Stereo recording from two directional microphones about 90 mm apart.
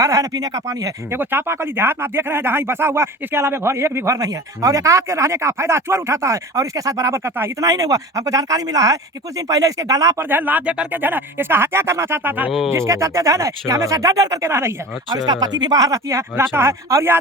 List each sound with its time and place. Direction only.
0.0 s speech: 35° right (ahead or behind)
1.1 s speech: 25° right (ahead or behind)
7.6 s speech: 40° right (ahead or behind)
10.2 s speech: 20° right (ahead or behind)
12.7 s speech: 35° right (ahead or behind)
14.5 s speech: 30° right (ahead or behind)
15.3 s speech: 50° right (ahead or behind); by 17.2 s 30° right (ahead or behind)